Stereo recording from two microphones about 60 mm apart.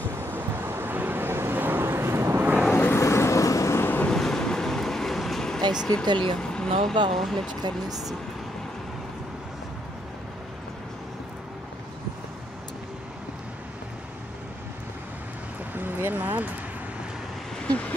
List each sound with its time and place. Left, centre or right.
0.2 s vehicle: right
2.7 s vehicle: left
3.0 s vehicle: left
3.7 s vehicle: left
4.1 s vehicle: centre
5.9 s speech: centre
15.7 s a sound: right
17.6 s vehicle: left